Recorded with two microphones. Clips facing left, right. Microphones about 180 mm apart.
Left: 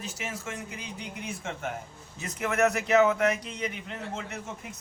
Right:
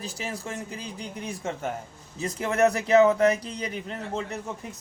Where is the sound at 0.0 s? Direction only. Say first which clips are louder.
Right 3 dB; 35° right (ahead or behind).